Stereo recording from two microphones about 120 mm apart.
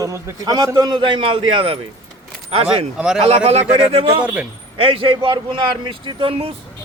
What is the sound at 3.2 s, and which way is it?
Speech, 60° right (ahead or behind).